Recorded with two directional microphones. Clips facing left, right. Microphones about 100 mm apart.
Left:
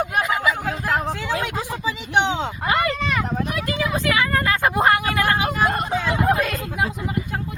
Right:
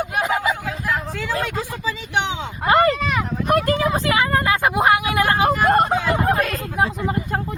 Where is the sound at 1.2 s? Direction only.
15° left (ahead or behind).